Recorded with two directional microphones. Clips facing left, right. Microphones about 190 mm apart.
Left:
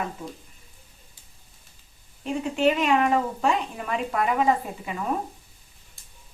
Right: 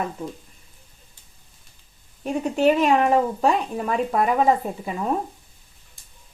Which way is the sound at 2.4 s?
40° right (ahead or behind).